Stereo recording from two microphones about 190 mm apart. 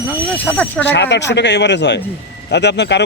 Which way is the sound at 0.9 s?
65° left (ahead or behind).